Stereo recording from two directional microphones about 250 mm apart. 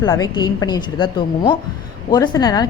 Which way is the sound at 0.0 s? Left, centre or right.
Centre.